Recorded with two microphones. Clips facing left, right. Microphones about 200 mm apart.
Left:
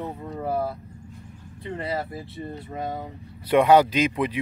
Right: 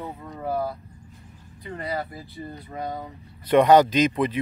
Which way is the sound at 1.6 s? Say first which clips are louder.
Left 1 dB; 25° left (ahead or behind).